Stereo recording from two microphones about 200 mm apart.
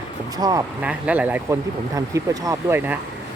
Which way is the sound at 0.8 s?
5° right (ahead or behind).